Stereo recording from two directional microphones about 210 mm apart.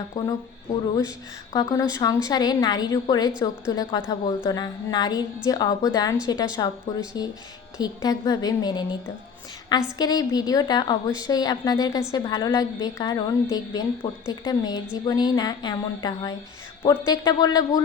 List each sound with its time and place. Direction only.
0.1 s a woman's voice: 20° left (ahead or behind)
1.5 s a woman's voice: 15° left (ahead or behind)
10.0 s a woman's voice: 20° left (ahead or behind)